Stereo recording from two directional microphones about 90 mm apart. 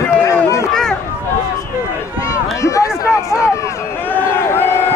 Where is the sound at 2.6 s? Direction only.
35° left (ahead or behind).